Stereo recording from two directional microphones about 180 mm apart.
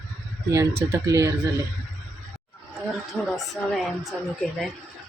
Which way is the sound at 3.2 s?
5° left (ahead or behind).